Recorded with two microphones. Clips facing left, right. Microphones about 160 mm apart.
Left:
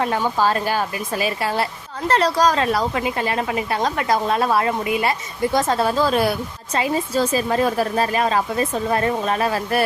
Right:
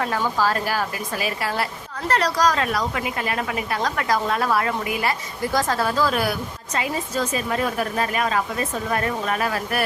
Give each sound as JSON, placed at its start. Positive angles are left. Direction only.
{"t": 0.0, "sound": "a woman's voice", "side_deg": 25}